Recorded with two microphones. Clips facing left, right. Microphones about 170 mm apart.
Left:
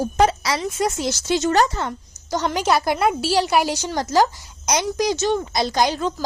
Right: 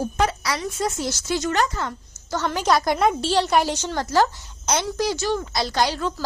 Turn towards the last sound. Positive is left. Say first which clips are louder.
# left 2 dB
turn(degrees=15)  # may be behind; listen again after turning